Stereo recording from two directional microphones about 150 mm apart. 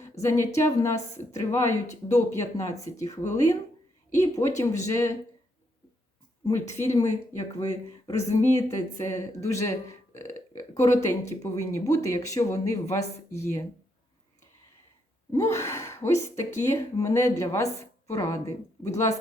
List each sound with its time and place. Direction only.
0.2 s speech: 20° left (ahead or behind)
6.4 s speech: 20° left (ahead or behind)
10.8 s speech: 50° left (ahead or behind)
11.0 s speech: 20° left (ahead or behind)
15.3 s speech: 20° left (ahead or behind)